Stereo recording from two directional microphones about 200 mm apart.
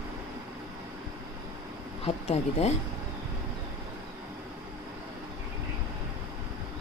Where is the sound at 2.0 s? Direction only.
30° left (ahead or behind).